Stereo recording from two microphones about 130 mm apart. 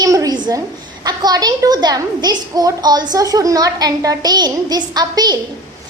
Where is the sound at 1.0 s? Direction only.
30° right (ahead or behind).